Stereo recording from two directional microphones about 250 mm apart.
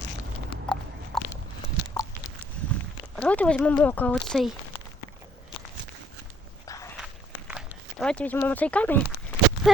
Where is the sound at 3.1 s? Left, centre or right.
Centre.